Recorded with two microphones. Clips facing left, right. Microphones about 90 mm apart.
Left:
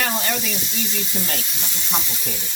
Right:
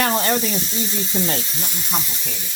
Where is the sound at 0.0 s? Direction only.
40° right (ahead or behind).